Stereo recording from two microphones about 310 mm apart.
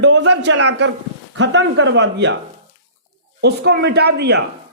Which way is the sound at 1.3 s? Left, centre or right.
Right.